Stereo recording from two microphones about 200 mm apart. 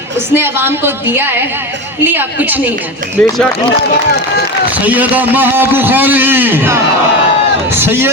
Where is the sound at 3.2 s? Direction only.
5° left (ahead or behind).